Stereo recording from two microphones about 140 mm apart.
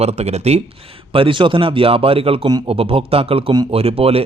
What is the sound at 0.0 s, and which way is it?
Speech, 50° right (ahead or behind).